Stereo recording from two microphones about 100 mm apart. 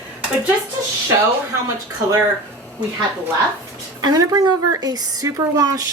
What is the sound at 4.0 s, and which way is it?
Speech, 40° right (ahead or behind).